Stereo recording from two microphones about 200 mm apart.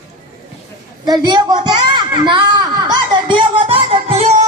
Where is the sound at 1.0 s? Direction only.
20° right (ahead or behind).